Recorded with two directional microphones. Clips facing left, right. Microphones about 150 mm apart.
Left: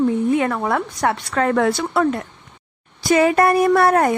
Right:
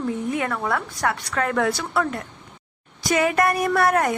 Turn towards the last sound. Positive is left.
turn(degrees=30)  # may be behind; listen again after turning